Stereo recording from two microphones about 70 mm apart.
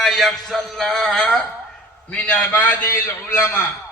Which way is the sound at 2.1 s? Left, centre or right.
Centre.